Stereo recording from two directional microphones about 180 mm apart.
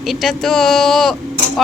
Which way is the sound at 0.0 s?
Centre (ahead or behind).